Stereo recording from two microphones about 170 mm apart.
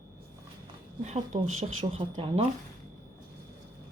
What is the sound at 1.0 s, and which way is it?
Speech, 40° right (ahead or behind).